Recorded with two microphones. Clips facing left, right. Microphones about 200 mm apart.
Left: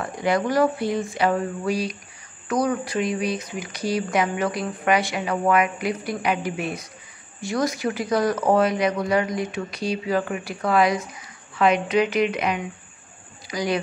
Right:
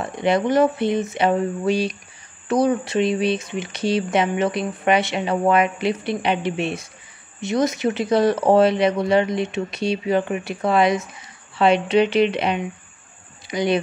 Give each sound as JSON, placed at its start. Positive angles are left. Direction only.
{"t": 0.0, "sound": "speech", "side_deg": -25}